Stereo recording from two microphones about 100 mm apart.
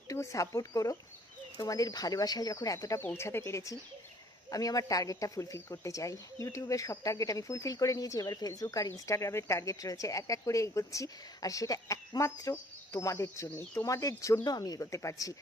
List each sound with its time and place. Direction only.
0.1 s speech: 35° left (ahead or behind)